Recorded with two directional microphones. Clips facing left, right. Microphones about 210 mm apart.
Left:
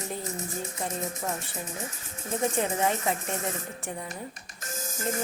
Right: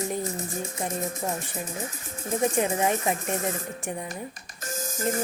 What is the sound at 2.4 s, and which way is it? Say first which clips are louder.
Speech: right 3 dB; 15° right (ahead or behind).